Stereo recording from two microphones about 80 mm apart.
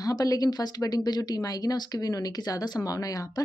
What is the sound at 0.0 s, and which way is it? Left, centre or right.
A woman's voice, left.